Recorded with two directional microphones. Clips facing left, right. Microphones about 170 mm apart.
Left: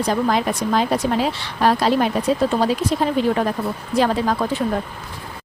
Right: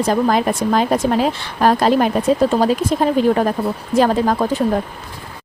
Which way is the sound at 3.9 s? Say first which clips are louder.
Right 4 dB; 45° right (ahead or behind).